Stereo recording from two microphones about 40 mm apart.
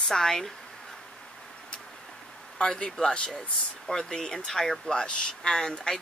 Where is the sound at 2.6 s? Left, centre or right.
Left.